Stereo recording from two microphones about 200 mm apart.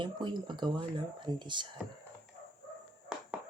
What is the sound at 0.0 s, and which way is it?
Speech, 25° right (ahead or behind).